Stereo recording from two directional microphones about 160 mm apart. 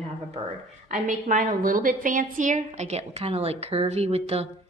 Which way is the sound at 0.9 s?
50° right (ahead or behind).